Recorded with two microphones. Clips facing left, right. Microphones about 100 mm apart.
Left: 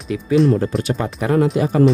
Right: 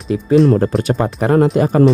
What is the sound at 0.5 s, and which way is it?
Speech, 45° right (ahead or behind).